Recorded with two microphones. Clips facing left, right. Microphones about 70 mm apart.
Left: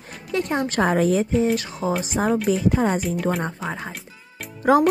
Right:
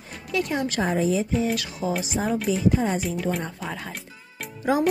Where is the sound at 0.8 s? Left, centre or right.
Left.